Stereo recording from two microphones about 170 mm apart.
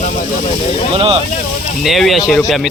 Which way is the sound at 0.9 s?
35° right (ahead or behind).